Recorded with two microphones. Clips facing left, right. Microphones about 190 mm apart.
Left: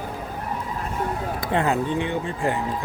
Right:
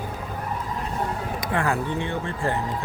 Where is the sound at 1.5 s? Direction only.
20° left (ahead or behind).